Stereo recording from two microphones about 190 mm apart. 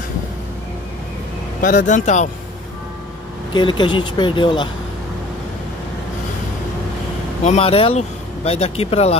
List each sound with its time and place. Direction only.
1.6 s speech: 40° left (ahead or behind)
3.5 s speech: 25° left (ahead or behind)
7.4 s speech: 30° left (ahead or behind)